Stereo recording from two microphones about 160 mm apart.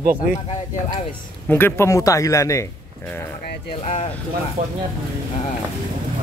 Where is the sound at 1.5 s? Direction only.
10° left (ahead or behind).